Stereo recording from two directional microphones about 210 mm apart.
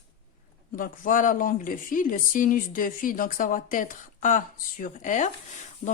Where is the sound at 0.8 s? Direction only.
40° left (ahead or behind).